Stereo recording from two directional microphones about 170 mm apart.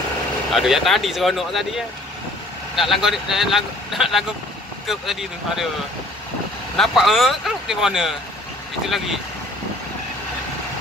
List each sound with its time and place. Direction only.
0.5 s speech: centre (ahead or behind)
2.7 s speech: centre (ahead or behind)
6.8 s speech: centre (ahead or behind)